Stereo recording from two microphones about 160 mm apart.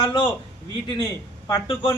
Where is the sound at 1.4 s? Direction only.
30° left (ahead or behind).